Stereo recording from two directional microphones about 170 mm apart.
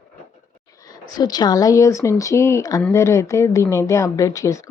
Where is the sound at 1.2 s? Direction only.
25° left (ahead or behind).